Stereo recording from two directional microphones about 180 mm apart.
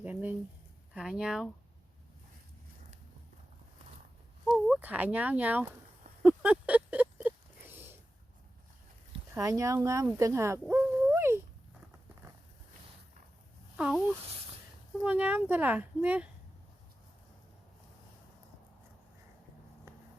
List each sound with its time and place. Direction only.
0.0 s a sound: 10° right (ahead or behind)
0.9 s speech: 5° right (ahead or behind)
4.5 s speech: 5° right (ahead or behind)
6.2 s a sound: 5° right (ahead or behind)
9.3 s speech: 15° right (ahead or behind)
13.7 s speech: 5° right (ahead or behind)